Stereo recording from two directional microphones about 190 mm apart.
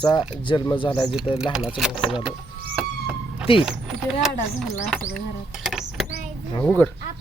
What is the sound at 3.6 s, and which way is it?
Speech, 5° right (ahead or behind).